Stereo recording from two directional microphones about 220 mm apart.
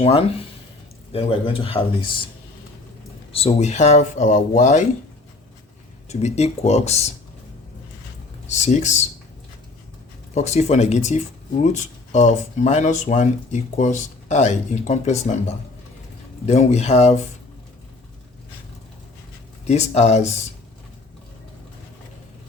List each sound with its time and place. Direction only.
0.0 s speech: 30° left (ahead or behind)
3.3 s speech: 30° left (ahead or behind)
6.1 s speech: 30° left (ahead or behind)
8.4 s speech: 30° left (ahead or behind)
10.3 s speech: 30° left (ahead or behind)
19.6 s speech: 30° left (ahead or behind)